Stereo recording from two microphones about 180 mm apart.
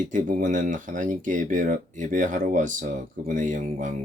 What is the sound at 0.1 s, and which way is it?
Speech, 45° right (ahead or behind).